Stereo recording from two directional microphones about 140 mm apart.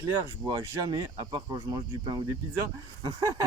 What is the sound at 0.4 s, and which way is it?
Speech, 30° right (ahead or behind).